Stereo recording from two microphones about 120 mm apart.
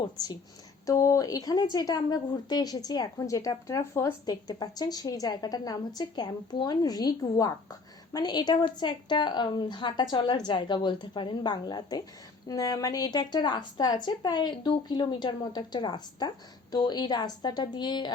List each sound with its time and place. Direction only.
0.9 s speech: 30° left (ahead or behind)